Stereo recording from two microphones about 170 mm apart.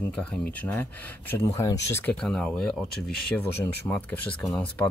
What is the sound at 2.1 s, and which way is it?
Speech, 5° left (ahead or behind).